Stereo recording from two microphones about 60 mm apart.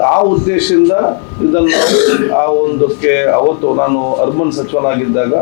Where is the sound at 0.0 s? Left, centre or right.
Left.